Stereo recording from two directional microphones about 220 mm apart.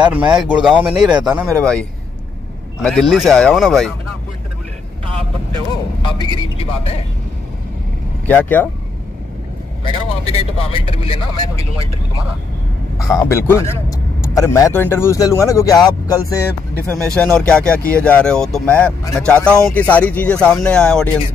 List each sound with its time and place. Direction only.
0.1 s speech: 5° right (ahead or behind)
1.6 s speech: 5° left (ahead or behind)
6.0 s speech: 20° left (ahead or behind)
8.3 s a man's voice: 10° left (ahead or behind)
9.8 s speech: 25° left (ahead or behind)
13.0 s a man's voice: 15° left (ahead or behind)
16.8 s speech: 5° left (ahead or behind)